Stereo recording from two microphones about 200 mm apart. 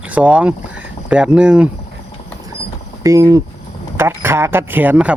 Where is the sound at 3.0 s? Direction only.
15° right (ahead or behind).